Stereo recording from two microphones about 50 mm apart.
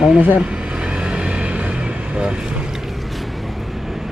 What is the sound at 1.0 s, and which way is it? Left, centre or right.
Music, centre.